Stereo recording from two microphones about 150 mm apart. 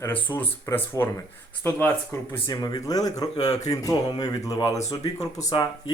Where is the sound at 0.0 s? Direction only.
15° left (ahead or behind).